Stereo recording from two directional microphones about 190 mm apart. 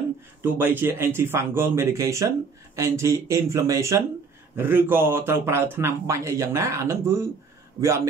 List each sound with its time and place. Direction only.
0.4 s a man's voice: 10° right (ahead or behind)